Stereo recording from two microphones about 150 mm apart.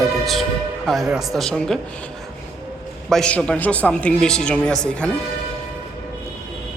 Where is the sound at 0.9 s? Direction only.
Centre (ahead or behind).